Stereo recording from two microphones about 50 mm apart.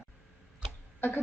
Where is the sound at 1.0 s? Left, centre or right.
Left.